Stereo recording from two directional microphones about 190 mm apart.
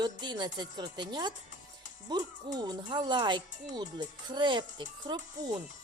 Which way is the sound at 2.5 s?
20° right (ahead or behind).